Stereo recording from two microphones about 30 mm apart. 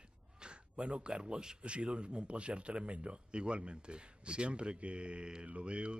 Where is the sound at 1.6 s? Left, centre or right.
Right.